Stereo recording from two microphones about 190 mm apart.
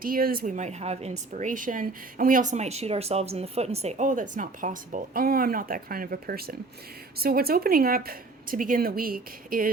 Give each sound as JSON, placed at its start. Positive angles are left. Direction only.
{"t": 0.0, "sound": "a woman's voice", "side_deg": -50}